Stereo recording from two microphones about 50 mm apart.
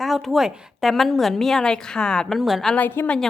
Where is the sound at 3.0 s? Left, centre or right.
Left.